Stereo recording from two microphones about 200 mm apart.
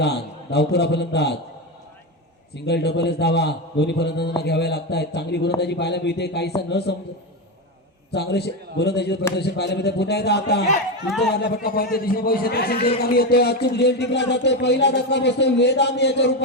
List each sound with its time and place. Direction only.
0.0 s a man's voice: 55° left (ahead or behind)
2.6 s a man's voice: 55° left (ahead or behind)
8.1 s a man's voice: 55° left (ahead or behind)